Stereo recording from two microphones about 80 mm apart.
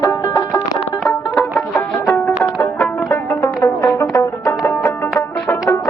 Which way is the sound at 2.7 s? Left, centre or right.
Left.